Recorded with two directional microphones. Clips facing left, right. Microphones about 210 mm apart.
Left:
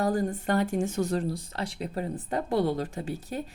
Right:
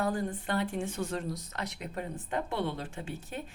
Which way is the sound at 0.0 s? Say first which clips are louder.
Left 5 dB; 40° left (ahead or behind).